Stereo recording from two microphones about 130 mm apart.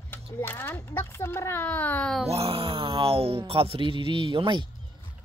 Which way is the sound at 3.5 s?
45° right (ahead or behind).